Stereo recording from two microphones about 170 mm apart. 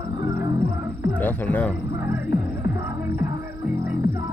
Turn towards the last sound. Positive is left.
turn(degrees=-15)  # may be behind; listen again after turning